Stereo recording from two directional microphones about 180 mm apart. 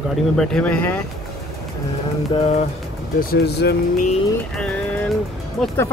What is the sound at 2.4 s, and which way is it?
Speech, 35° left (ahead or behind).